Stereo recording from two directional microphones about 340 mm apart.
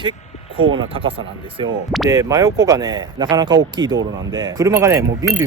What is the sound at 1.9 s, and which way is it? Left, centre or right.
Speech, centre.